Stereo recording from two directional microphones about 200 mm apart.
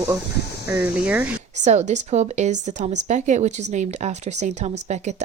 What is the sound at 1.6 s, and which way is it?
Speech, 35° right (ahead or behind).